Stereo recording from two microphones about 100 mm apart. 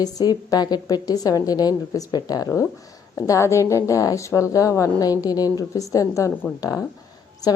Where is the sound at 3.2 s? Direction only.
30° left (ahead or behind).